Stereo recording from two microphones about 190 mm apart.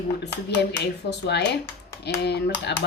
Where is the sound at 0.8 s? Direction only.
60° left (ahead or behind).